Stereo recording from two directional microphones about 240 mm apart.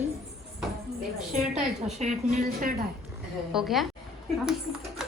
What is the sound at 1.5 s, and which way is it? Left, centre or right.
A woman's voice, right.